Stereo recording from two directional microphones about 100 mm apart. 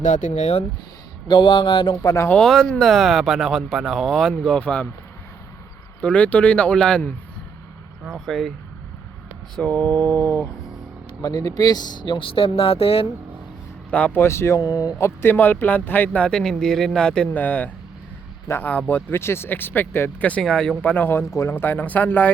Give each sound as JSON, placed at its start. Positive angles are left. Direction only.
{"t": 1.3, "sound": "a sound", "side_deg": 55}
{"t": 2.0, "sound": "speech", "side_deg": 30}
{"t": 2.3, "sound": "speech", "side_deg": 5}
{"t": 6.0, "sound": "speech", "side_deg": 15}
{"t": 8.0, "sound": "speech", "side_deg": 0}
{"t": 9.6, "sound": "speech", "side_deg": 15}
{"t": 11.2, "sound": "speech", "side_deg": 35}
{"t": 13.9, "sound": "speech", "side_deg": 15}
{"t": 14.2, "sound": "speech", "side_deg": 25}
{"t": 20.4, "sound": "speech", "side_deg": 5}